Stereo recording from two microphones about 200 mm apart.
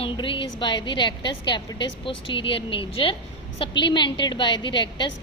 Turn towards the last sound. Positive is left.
turn(degrees=25)  # may be behind; listen again after turning